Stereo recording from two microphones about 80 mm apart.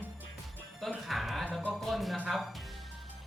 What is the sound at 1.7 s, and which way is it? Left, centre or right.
Speech, centre.